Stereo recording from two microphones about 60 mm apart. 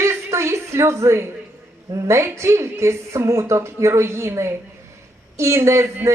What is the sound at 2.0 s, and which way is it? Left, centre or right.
A woman's voice, right.